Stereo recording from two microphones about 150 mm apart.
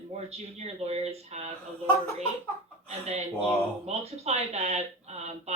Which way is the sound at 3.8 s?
45° right (ahead or behind).